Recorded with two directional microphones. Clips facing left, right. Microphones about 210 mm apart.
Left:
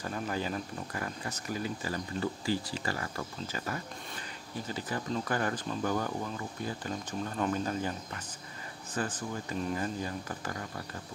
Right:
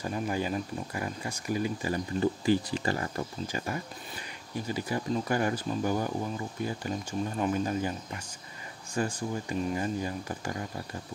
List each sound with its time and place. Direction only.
0.0 s speech: 15° right (ahead or behind)